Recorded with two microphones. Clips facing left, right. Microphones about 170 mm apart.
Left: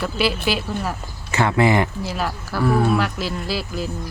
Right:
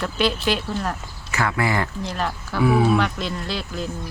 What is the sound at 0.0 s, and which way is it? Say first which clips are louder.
Speech: left 1 dB; 5° left (ahead or behind).